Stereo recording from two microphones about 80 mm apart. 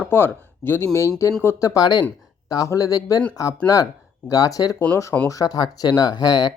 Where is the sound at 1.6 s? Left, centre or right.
Left.